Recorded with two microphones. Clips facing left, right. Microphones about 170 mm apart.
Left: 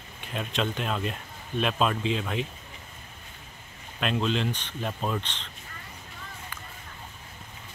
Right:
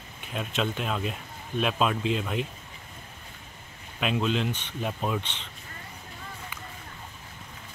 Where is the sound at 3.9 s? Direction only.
5° right (ahead or behind).